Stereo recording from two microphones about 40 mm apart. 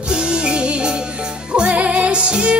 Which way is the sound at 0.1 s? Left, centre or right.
Right.